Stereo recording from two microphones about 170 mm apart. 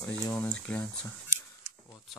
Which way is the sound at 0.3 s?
5° left (ahead or behind).